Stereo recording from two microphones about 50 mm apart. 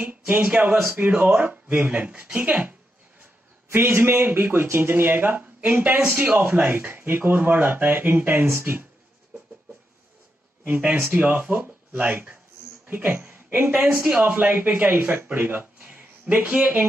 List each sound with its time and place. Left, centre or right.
0.0 s speech: right
3.7 s a man's voice: right
10.6 s speech: right
13.7 s speech: centre
14.2 s speech: right
15.3 s a sound: right